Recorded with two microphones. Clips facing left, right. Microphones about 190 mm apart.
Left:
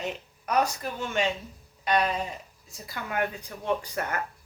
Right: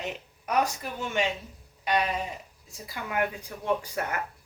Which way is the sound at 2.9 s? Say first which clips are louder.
Even; 5° right (ahead or behind).